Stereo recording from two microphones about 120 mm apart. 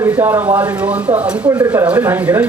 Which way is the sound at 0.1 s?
20° right (ahead or behind).